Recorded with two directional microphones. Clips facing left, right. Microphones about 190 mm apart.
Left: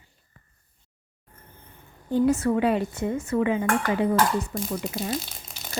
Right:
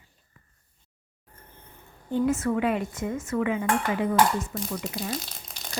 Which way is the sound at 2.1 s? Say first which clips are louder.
Left 3 dB; 35° left (ahead or behind).